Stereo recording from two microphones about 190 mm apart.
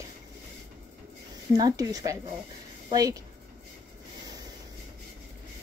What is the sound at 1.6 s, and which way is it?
Speech, 20° right (ahead or behind).